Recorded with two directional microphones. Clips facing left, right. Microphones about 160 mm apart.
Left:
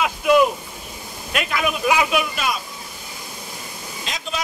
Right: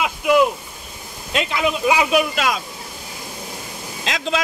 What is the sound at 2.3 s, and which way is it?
Speech, 90° right.